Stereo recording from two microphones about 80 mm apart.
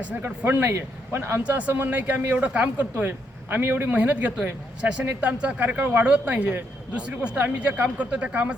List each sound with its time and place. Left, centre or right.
0.0 s speech: centre
3.9 s speech: centre